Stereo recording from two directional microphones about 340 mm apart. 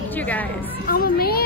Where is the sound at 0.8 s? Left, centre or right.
Left.